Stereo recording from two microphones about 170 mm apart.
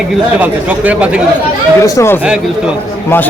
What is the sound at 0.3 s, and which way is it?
Speech, 10° right (ahead or behind).